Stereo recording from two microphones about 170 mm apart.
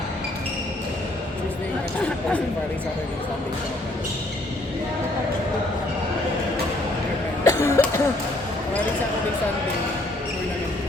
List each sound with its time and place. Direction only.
7.4 s cough: 20° left (ahead or behind)